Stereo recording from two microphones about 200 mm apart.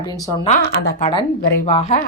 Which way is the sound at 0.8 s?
50° left (ahead or behind).